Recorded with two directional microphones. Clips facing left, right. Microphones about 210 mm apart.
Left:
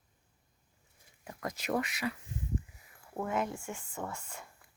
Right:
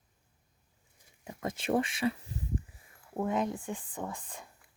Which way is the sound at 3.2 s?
20° right (ahead or behind).